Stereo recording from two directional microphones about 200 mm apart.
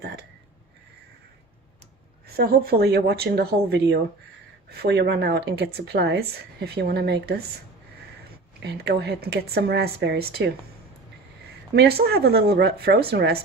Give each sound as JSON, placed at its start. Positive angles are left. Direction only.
{"t": 2.3, "sound": "speech", "side_deg": -50}
{"t": 8.6, "sound": "speech", "side_deg": -55}